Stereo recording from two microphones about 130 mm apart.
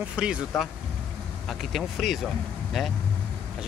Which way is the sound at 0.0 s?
10° right (ahead or behind).